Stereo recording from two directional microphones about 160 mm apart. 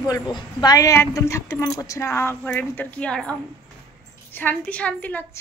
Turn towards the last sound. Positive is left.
turn(degrees=10)  # may be behind; listen again after turning